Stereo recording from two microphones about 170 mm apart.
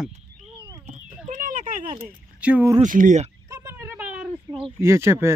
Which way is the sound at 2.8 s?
50° right (ahead or behind).